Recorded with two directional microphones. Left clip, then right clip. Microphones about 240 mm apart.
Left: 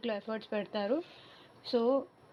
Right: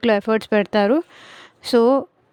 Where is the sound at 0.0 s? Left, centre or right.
Right.